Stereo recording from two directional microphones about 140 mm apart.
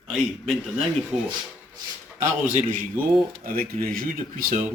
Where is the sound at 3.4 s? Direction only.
85° right.